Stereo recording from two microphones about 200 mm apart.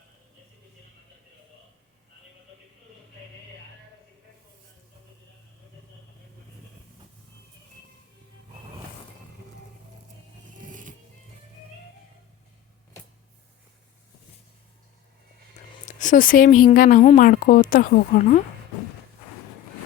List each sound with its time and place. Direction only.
10.5 s vehicle: 40° right (ahead or behind)
15.9 s speech: 40° left (ahead or behind)